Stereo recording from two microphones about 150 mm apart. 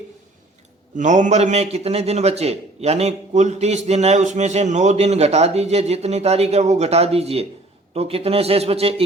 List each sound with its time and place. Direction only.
0.9 s a man's voice: 55° right (ahead or behind)